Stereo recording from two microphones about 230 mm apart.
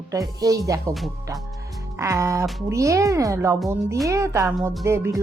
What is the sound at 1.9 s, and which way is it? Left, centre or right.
Speech, centre.